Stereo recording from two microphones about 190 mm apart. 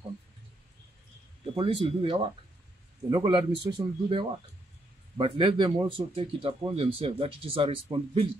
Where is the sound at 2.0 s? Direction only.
25° right (ahead or behind).